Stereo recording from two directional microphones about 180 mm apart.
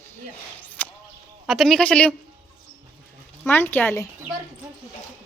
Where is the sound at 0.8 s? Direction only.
10° left (ahead or behind).